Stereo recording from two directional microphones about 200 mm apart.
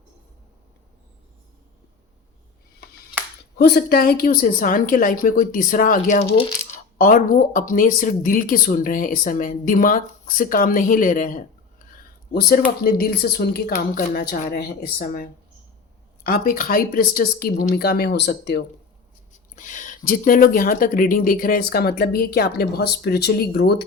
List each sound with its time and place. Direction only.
3.6 s speech: 55° left (ahead or behind)
6.3 s coin: 30° left (ahead or behind)
7.0 s speech: 45° left (ahead or behind)
19.5 s speech: 40° left (ahead or behind)